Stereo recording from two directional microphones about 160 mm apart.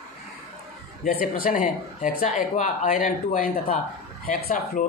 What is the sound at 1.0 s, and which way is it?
Speech, 65° left (ahead or behind).